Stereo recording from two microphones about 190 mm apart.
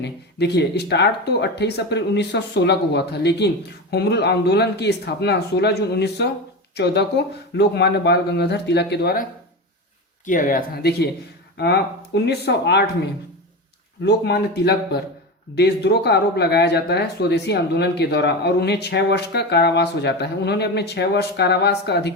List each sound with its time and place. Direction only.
0.0 s speech: 60° left (ahead or behind)
10.2 s speech: 45° left (ahead or behind); by 12.8 s 60° left (ahead or behind)
14.0 s speech: 60° left (ahead or behind)